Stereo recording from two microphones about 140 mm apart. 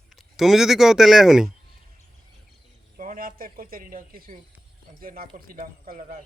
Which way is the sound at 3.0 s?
80° right.